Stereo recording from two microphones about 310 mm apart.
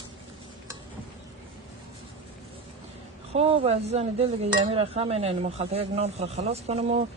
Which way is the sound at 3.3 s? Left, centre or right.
Centre.